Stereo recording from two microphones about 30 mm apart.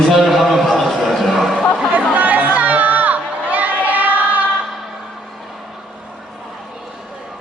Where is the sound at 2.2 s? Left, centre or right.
Right.